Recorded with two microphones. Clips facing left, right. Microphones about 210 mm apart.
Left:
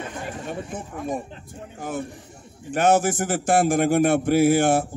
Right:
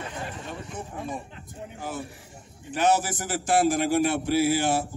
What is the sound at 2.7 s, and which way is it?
A man's voice, 50° left (ahead or behind).